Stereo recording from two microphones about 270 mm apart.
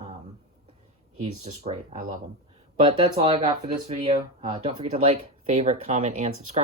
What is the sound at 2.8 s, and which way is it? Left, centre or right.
Speech, centre.